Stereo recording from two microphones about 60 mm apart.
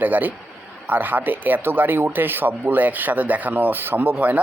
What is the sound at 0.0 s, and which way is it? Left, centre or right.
Speech, right.